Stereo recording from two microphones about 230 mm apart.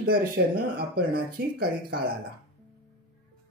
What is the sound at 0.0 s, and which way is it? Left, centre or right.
Speech, right.